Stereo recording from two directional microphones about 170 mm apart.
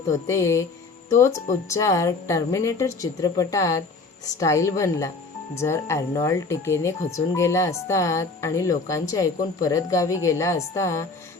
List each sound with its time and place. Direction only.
0.1 s speech: 15° left (ahead or behind)
1.6 s speech: 20° left (ahead or behind)